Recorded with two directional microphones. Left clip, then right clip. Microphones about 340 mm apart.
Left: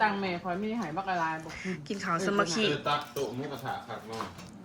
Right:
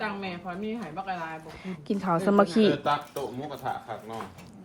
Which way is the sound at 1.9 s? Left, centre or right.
Centre.